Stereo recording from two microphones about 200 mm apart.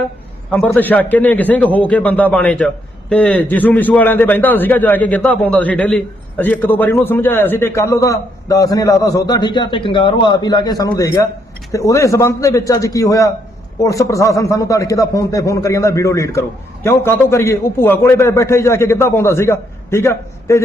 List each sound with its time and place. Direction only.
0.5 s a man's voice: 5° left (ahead or behind)